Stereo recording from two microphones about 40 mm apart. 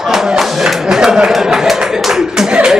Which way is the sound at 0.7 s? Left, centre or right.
Centre.